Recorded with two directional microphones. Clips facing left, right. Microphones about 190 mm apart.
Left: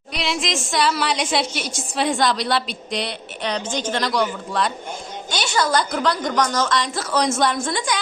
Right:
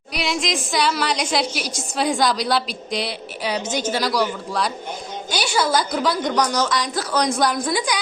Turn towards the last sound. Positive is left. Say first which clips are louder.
# right 1 dB
turn(degrees=-5)  # may be behind; listen again after turning